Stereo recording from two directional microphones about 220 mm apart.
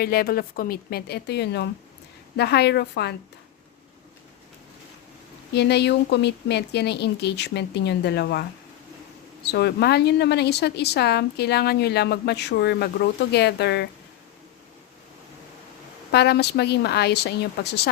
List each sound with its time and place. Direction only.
0.0 s speech: 45° left (ahead or behind)
5.5 s speech: 50° left (ahead or behind)
16.1 s speech: 50° left (ahead or behind)